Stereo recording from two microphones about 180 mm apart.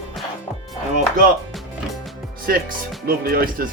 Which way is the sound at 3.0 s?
55° right (ahead or behind).